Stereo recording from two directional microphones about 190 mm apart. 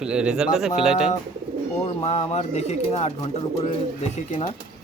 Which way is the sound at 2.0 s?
35° left (ahead or behind).